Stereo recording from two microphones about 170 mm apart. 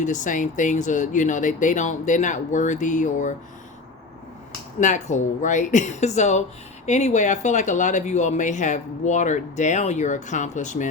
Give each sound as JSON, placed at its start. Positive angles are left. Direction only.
{"t": 0.0, "sound": "speech", "side_deg": 45}
{"t": 4.8, "sound": "speech", "side_deg": 45}